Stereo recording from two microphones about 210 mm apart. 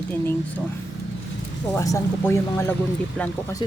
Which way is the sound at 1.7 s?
15° left (ahead or behind).